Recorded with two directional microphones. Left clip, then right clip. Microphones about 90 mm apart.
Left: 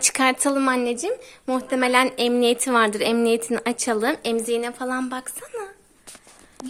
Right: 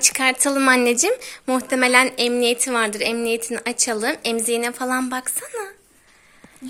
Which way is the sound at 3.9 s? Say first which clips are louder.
Left 3 dB; 35° left (ahead or behind).